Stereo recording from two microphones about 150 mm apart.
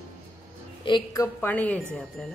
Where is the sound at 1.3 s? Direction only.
10° left (ahead or behind).